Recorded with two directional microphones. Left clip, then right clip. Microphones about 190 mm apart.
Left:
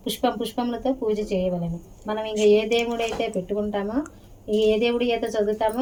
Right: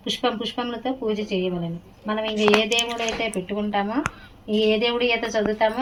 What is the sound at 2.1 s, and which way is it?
Speech, 75° left (ahead or behind).